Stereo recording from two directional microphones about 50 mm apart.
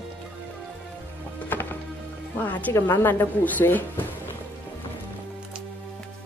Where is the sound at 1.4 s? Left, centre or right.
Left.